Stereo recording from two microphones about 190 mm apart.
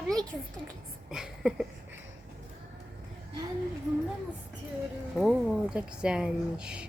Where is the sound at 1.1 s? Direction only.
5° right (ahead or behind).